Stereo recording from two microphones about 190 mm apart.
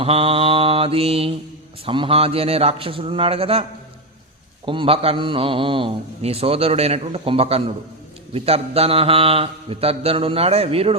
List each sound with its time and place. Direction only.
0.0 s mantra: 30° right (ahead or behind)
1.8 s a man's voice: 30° right (ahead or behind)